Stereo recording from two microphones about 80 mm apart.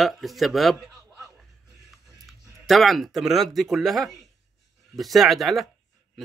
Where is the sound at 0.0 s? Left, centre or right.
Centre.